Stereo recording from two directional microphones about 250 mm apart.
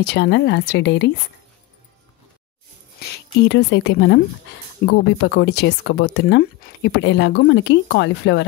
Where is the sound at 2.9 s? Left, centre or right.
Left.